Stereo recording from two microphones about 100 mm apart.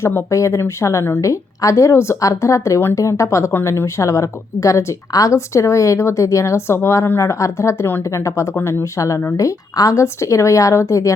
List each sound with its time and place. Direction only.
0.0 s a woman's voice: 25° left (ahead or behind)